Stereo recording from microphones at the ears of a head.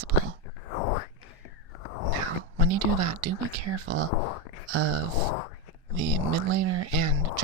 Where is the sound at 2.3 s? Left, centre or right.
Right.